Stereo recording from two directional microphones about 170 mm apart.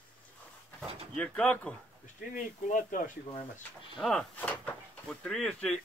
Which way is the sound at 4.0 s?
5° left (ahead or behind).